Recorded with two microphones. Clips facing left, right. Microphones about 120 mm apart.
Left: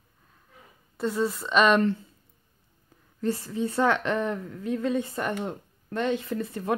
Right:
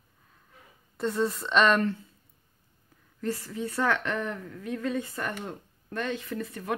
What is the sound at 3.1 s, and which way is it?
A woman's voice, 25° left (ahead or behind).